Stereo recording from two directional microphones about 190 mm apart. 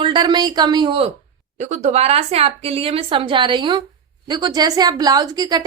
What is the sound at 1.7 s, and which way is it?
A woman's voice, 35° right (ahead or behind).